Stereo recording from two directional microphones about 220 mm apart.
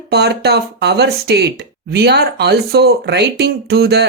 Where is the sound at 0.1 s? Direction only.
50° right (ahead or behind).